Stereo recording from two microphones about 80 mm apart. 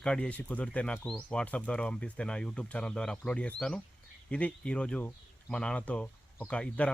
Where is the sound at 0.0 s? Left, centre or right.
Centre.